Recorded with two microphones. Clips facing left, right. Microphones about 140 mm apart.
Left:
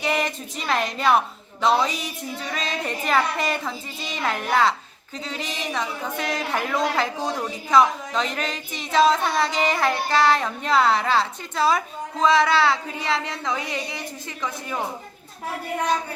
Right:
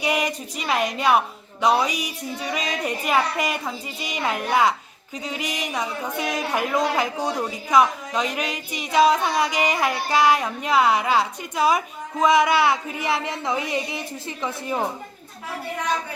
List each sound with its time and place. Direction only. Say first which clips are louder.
0.0 s a woman's voice: right 1 dB; 10° right (ahead or behind)